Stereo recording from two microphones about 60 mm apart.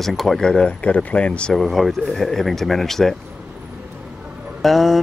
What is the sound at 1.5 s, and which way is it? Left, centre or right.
Speech, centre.